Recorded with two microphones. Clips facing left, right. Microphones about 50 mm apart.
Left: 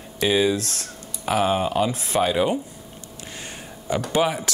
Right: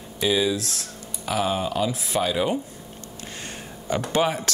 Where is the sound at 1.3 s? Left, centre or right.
Left.